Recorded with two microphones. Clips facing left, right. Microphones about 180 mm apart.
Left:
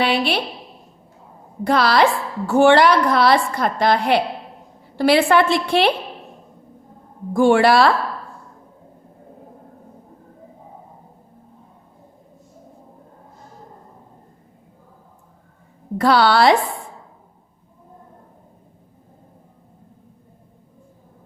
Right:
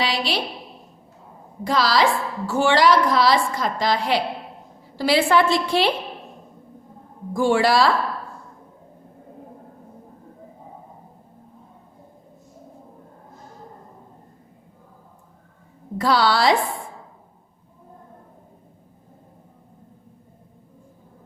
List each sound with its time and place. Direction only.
0.0 s a woman's voice: 55° left (ahead or behind)
1.6 s a woman's voice: 60° left (ahead or behind)
7.3 s a woman's voice: 60° left (ahead or behind)
16.0 s a woman's voice: 60° left (ahead or behind)